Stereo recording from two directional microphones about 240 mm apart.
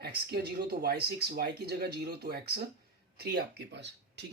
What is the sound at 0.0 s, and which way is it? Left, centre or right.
Speech, right.